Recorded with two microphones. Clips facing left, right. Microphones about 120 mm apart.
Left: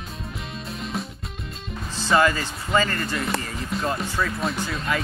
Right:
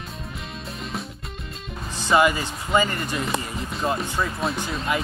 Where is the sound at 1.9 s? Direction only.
15° right (ahead or behind).